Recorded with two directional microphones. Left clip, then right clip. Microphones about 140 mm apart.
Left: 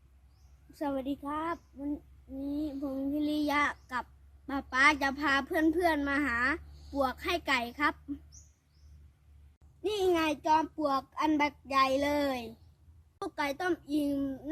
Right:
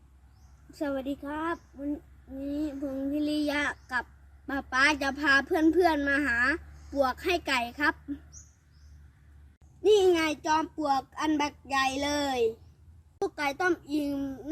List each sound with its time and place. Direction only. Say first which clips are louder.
0.7 s a woman's voice: right 2 dB; 20° left (ahead or behind)
9.8 s a woman's voice: right 7 dB; 20° left (ahead or behind)